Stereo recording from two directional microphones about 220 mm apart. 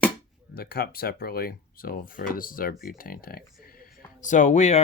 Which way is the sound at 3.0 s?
40° left (ahead or behind).